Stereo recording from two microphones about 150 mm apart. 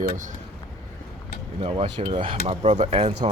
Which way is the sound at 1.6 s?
40° right (ahead or behind).